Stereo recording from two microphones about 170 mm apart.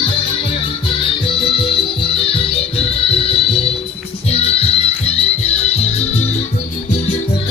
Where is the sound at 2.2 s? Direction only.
35° left (ahead or behind).